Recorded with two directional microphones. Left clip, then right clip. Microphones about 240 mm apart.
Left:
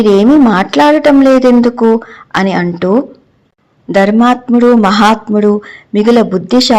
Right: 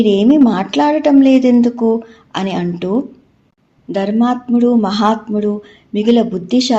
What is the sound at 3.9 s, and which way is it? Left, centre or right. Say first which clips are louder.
Speech: left 8 dB; left.